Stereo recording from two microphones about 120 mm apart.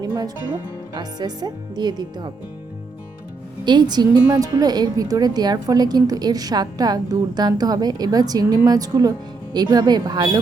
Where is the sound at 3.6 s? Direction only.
35° right (ahead or behind).